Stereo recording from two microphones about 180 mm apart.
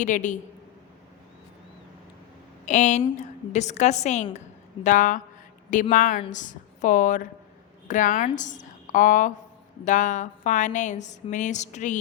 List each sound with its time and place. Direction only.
0.0 s a woman's voice: 45° left (ahead or behind)
2.6 s a woman's voice: 40° left (ahead or behind)